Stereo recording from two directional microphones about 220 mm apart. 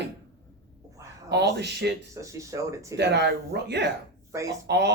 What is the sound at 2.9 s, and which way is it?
Speech, 50° right (ahead or behind).